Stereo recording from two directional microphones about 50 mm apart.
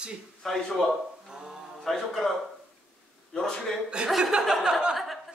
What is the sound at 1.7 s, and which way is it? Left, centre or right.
Speech, centre.